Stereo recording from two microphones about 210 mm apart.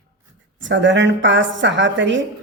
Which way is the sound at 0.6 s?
60° right (ahead or behind).